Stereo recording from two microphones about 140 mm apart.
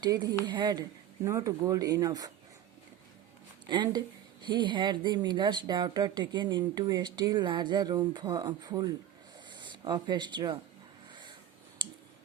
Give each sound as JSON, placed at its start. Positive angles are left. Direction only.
{"t": 0.0, "sound": "speech", "side_deg": -30}
{"t": 3.7, "sound": "speech", "side_deg": -30}
{"t": 11.1, "sound": "wheeze", "side_deg": -35}